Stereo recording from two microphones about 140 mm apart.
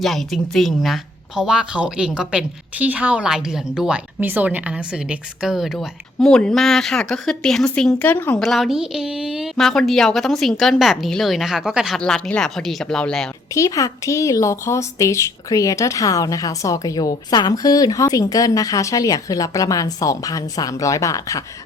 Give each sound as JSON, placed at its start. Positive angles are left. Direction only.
{"t": 0.0, "sound": "a woman's voice", "side_deg": 0}
{"t": 8.4, "sound": "a woman's voice", "side_deg": 0}
{"t": 13.5, "sound": "a woman's voice", "side_deg": 25}